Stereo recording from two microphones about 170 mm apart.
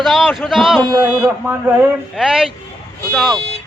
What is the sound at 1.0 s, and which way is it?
Speech, 10° right (ahead or behind).